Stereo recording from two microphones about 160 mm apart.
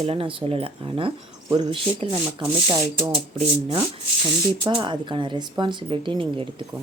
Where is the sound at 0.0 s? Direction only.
35° right (ahead or behind).